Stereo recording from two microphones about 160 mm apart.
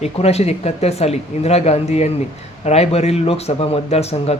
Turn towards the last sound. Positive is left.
turn(degrees=40)  # may be behind; listen again after turning